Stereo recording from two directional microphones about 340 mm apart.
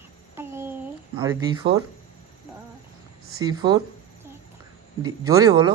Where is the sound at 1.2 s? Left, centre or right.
Centre.